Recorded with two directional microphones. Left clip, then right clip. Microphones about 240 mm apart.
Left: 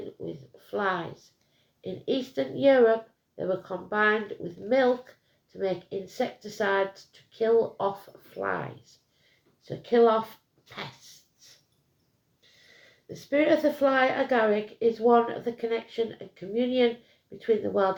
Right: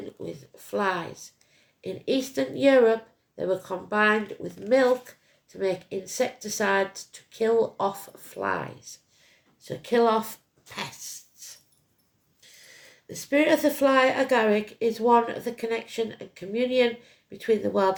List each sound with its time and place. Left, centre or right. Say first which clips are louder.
0.7 s a woman's voice: right 2 dB; right
5.5 s a woman's voice: right 2 dB; right
9.6 s a woman's voice: left 1 dB; right
13.1 s a woman's voice: right 1 dB; right